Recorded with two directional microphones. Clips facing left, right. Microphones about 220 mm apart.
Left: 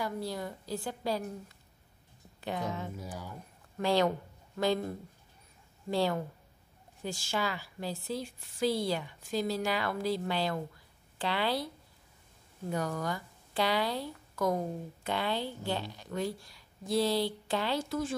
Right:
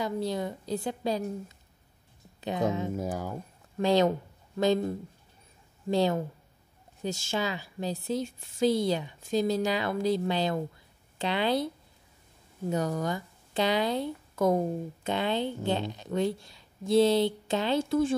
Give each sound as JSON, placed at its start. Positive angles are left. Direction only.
{"t": 0.0, "sound": "speech", "side_deg": -20}
{"t": 3.0, "sound": "speech", "side_deg": -45}
{"t": 3.8, "sound": "speech", "side_deg": -20}